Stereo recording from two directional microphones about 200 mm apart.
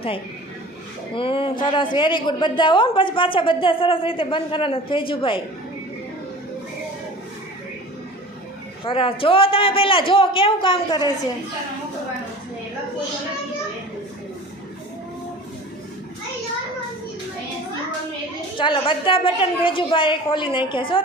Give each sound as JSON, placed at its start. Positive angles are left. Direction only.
{"t": 1.1, "sound": "a woman's voice", "side_deg": 25}
{"t": 8.8, "sound": "a woman's voice", "side_deg": 25}
{"t": 18.6, "sound": "a woman's voice", "side_deg": 25}